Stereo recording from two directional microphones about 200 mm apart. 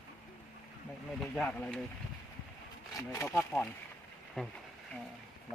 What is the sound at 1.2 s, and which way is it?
Speech, centre (ahead or behind).